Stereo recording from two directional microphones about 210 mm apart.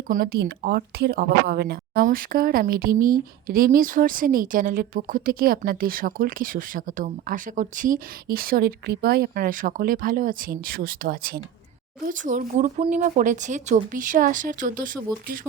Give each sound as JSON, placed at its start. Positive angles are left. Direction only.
{"t": 0.1, "sound": "a woman's voice", "side_deg": -45}